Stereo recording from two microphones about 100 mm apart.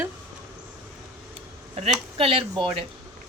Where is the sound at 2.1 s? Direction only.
65° right (ahead or behind).